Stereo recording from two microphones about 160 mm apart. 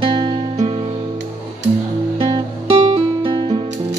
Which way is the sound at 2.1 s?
35° right (ahead or behind).